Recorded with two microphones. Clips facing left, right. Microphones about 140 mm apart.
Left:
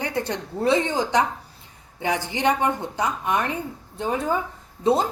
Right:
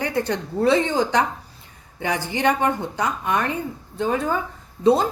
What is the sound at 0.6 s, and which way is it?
A woman's voice, 15° left (ahead or behind).